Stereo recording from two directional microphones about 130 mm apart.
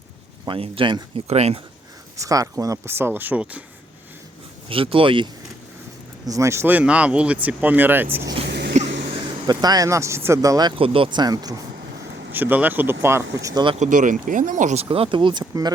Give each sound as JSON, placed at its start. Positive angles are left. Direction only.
{"t": 0.4, "sound": "speech", "side_deg": -40}
{"t": 1.3, "sound": "speech", "side_deg": -55}
{"t": 2.1, "sound": "speech", "side_deg": -25}
{"t": 4.7, "sound": "speech", "side_deg": -45}
{"t": 6.2, "sound": "speech", "side_deg": -25}
{"t": 8.4, "sound": "a sound", "side_deg": -65}
{"t": 9.5, "sound": "speech", "side_deg": -30}
{"t": 10.8, "sound": "speech", "side_deg": -45}
{"t": 12.3, "sound": "speech", "side_deg": -15}
{"t": 13.7, "sound": "speech", "side_deg": -70}
{"t": 14.8, "sound": "speech", "side_deg": -45}